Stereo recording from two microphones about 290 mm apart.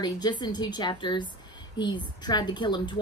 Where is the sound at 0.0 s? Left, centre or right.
Centre.